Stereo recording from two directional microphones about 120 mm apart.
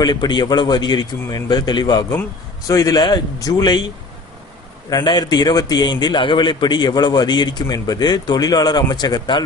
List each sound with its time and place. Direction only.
0.0 s a man's voice: 35° left (ahead or behind)
2.0 s a man's voice: 25° left (ahead or behind)
4.8 s a man's voice: 35° left (ahead or behind)